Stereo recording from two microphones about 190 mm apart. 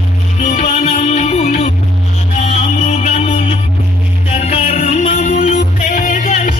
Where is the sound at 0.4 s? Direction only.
35° left (ahead or behind).